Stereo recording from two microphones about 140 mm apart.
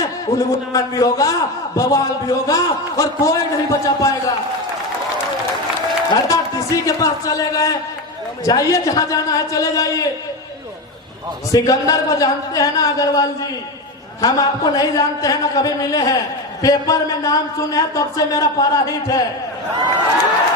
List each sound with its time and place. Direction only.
0.0 s a man's voice: 25° left (ahead or behind)
6.1 s a man's voice: 25° left (ahead or behind)
11.5 s a man's voice: 25° left (ahead or behind)